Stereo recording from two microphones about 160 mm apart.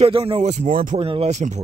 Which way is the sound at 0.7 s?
60° right (ahead or behind).